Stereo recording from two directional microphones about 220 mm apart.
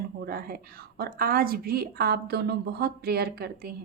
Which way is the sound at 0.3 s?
40° right (ahead or behind).